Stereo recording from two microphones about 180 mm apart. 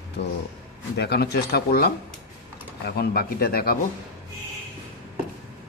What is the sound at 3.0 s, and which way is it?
Speech, 60° left (ahead or behind).